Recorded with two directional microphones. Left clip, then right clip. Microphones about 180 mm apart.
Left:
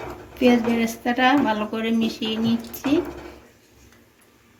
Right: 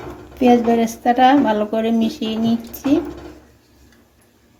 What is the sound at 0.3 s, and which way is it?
Speech, 50° right (ahead or behind).